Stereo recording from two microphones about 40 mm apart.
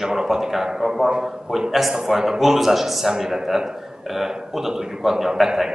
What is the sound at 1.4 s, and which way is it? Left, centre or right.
A man's voice, centre.